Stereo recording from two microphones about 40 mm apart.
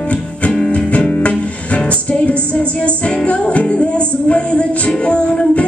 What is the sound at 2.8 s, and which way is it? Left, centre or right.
Music, left.